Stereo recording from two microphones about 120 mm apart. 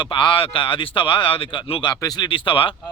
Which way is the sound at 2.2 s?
45° left (ahead or behind).